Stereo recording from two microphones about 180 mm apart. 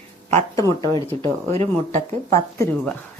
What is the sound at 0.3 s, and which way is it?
Speech, 15° left (ahead or behind).